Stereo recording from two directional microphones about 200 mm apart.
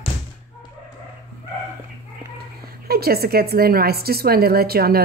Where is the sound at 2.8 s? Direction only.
50° right (ahead or behind).